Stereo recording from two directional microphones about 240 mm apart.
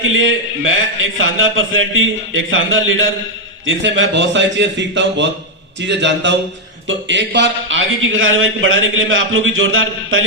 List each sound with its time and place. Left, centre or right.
0.0 s a man's voice: right